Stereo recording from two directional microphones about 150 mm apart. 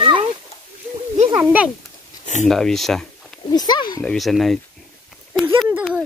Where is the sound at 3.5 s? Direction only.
25° left (ahead or behind).